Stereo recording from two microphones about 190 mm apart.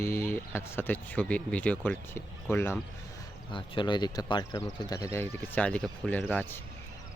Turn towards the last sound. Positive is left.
turn(degrees=5)  # may be behind; listen again after turning